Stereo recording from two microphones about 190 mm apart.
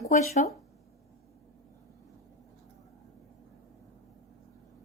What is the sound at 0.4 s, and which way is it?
Speech, 45° left (ahead or behind).